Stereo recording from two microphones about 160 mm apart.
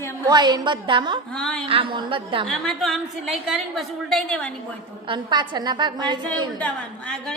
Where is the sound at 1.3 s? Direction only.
5° left (ahead or behind).